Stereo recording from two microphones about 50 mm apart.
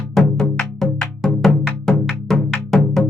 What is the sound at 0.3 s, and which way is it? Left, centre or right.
Music, centre.